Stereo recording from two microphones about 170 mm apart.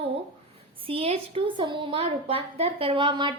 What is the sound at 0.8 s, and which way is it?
A woman's voice, 35° right (ahead or behind).